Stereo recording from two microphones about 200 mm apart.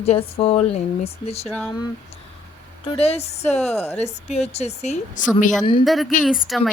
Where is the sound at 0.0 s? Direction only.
30° left (ahead or behind).